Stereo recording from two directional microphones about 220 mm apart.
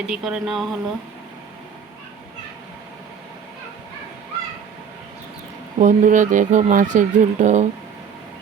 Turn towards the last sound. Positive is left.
turn(degrees=-35)  # may be behind; listen again after turning